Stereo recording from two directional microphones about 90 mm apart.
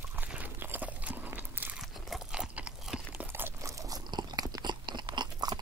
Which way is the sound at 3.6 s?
40° right (ahead or behind).